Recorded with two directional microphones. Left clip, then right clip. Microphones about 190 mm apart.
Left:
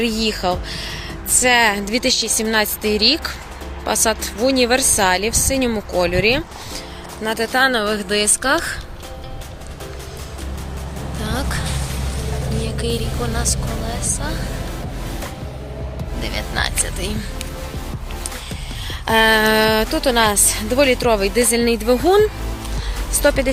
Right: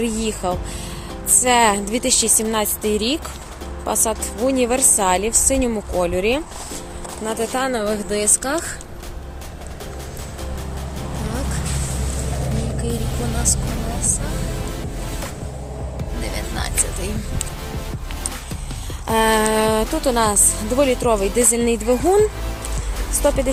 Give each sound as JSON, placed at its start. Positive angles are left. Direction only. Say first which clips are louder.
{"t": 0.0, "sound": "a woman's voice", "louder": "left 3 dB", "side_deg": 0}
{"t": 16.3, "sound": "a woman's voice", "louder": "left 6 dB", "side_deg": 0}
{"t": 19.0, "sound": "a woman's voice", "louder": "left 3 dB", "side_deg": 0}